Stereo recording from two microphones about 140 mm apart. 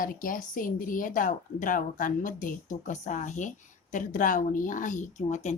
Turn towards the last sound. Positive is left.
turn(degrees=55)  # may be behind; listen again after turning